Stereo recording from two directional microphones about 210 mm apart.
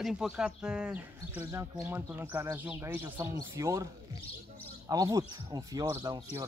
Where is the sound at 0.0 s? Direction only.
Centre (ahead or behind).